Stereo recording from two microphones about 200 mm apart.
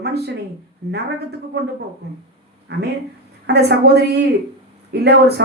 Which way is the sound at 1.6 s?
60° right (ahead or behind).